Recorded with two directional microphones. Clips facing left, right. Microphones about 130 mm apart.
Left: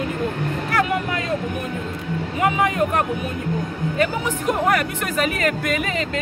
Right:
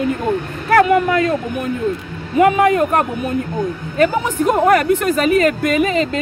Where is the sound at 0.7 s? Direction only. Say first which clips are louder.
Right 11 dB; 55° right (ahead or behind).